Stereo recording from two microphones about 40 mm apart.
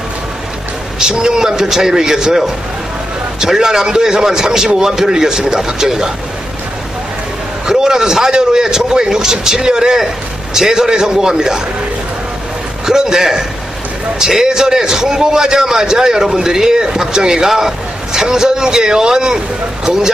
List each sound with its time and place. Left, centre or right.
0.9 s a man's voice: centre
7.6 s a man's voice: centre
12.8 s a man's voice: centre